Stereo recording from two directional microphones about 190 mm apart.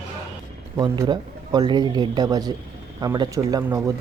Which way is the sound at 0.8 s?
20° right (ahead or behind).